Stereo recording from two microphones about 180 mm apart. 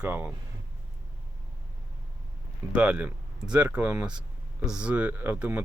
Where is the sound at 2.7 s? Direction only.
5° right (ahead or behind).